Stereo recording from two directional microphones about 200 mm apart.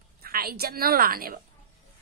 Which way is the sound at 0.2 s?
50° right (ahead or behind).